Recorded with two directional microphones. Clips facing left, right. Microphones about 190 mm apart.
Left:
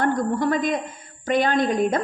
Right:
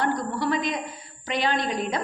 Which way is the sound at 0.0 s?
50° left (ahead or behind).